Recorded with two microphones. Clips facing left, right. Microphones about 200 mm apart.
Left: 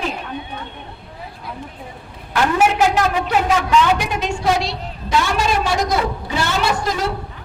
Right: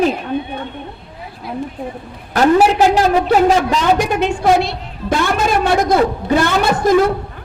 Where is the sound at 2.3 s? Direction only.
35° right (ahead or behind).